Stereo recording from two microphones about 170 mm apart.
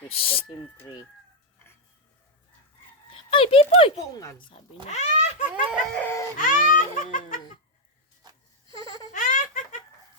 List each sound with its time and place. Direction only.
0.2 s speech: 35° left (ahead or behind)
3.1 s a sound: 30° left (ahead or behind)
3.9 s speech: 20° left (ahead or behind)
4.9 s a child's voice: 45° left (ahead or behind)
5.7 s speech: 10° left (ahead or behind)
6.3 s music: 50° left (ahead or behind)
8.7 s a sound: 20° left (ahead or behind)
9.1 s laughter: 50° left (ahead or behind)